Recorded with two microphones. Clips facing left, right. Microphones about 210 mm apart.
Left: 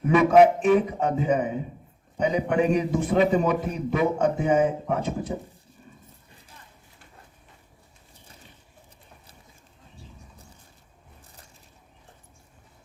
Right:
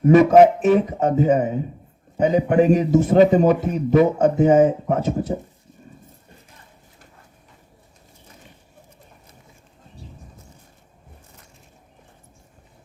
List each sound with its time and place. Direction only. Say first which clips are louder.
0.0 s a man's voice: right 5 dB; 40° right (ahead or behind)